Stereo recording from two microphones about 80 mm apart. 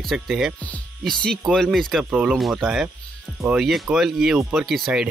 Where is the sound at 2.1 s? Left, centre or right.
Centre.